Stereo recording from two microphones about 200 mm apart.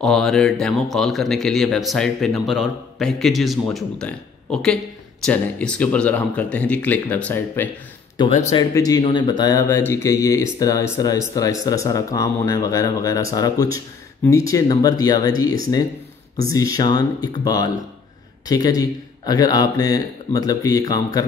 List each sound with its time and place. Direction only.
0.0 s speech: centre (ahead or behind)
8.2 s speech: 30° left (ahead or behind)
8.7 s speech: 20° left (ahead or behind)
18.8 s speech: 20° left (ahead or behind)